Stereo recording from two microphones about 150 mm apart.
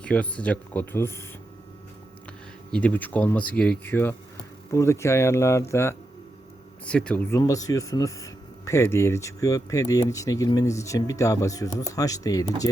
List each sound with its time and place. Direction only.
0.0 s speech: 10° left (ahead or behind)
2.7 s speech: 10° left (ahead or behind)
6.8 s speech: 5° left (ahead or behind)
7.3 s speech: 20° left (ahead or behind)